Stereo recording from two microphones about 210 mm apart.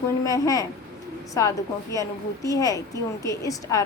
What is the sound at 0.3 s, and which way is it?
A woman's voice, 15° left (ahead or behind).